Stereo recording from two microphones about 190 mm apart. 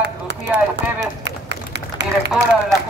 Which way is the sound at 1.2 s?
65° right (ahead or behind).